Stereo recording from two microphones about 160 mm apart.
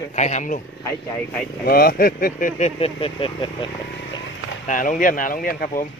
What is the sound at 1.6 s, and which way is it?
Speech, 70° left (ahead or behind).